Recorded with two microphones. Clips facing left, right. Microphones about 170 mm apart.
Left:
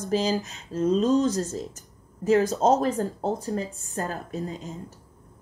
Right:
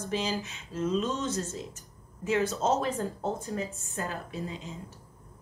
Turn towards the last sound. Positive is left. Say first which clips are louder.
# left 5 dB
turn(degrees=45)  # may be behind; listen again after turning